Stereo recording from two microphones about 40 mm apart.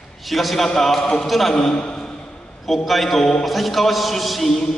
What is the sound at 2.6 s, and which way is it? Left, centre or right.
Music, centre.